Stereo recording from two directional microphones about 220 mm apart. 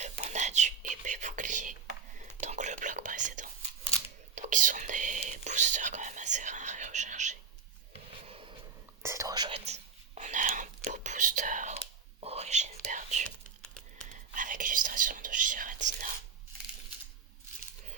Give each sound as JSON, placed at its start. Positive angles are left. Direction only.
{"t": 0.0, "sound": "whispering", "side_deg": -30}
{"t": 8.3, "sound": "a sound", "side_deg": -25}
{"t": 9.0, "sound": "whispering", "side_deg": -15}
{"t": 10.2, "sound": "a sound", "side_deg": -35}
{"t": 10.8, "sound": "whispering", "side_deg": -35}
{"t": 13.2, "sound": "whispering", "side_deg": 5}
{"t": 14.3, "sound": "whispering", "side_deg": -35}